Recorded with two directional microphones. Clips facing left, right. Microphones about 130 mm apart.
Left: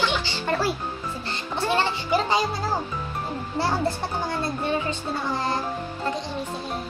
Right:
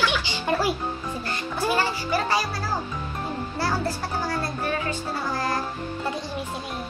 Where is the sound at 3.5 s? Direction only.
25° left (ahead or behind).